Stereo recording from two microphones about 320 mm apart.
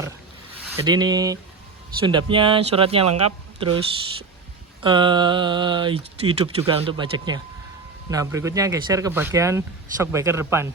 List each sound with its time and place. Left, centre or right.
0.8 s speech: centre
3.0 s speech: right
4.8 s speech: centre